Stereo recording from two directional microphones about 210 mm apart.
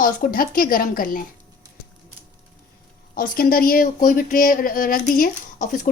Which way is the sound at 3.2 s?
40° left (ahead or behind).